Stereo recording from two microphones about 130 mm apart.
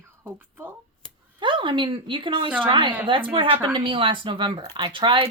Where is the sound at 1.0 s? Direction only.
5° left (ahead or behind).